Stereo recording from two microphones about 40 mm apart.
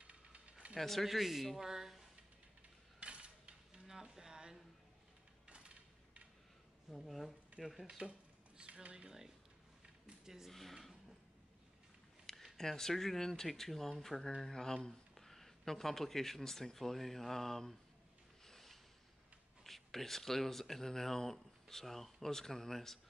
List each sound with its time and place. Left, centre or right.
0.0 s mechanisms: right
0.7 s speech: centre
3.0 s mechanisms: right
3.8 s a sound: centre
6.9 s speech: centre
8.0 s speech: right
8.5 s a sound: right
8.9 s speech: centre
10.5 s speech: centre
12.5 s speech: centre
18.4 s a sound: centre
19.6 s speech: centre